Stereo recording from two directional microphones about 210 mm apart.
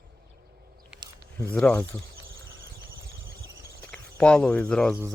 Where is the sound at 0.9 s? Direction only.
20° right (ahead or behind).